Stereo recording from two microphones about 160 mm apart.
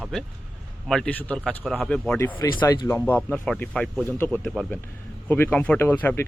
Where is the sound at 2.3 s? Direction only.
30° left (ahead or behind).